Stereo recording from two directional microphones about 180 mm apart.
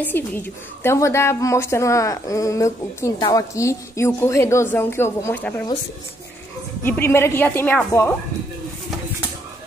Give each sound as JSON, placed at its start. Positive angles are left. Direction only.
{"t": 0.0, "sound": "a woman's voice", "side_deg": 10}
{"t": 6.8, "sound": "a woman's voice", "side_deg": 10}